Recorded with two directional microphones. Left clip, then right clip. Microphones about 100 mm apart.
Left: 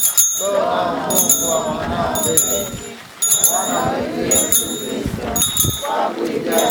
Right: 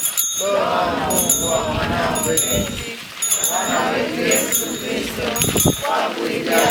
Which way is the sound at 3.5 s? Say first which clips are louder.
Even; 35° right (ahead or behind).